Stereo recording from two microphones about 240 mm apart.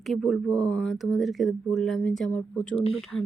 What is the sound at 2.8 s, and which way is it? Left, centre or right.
Speech, left.